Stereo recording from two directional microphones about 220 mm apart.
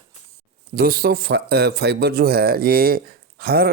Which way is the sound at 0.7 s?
40° right (ahead or behind).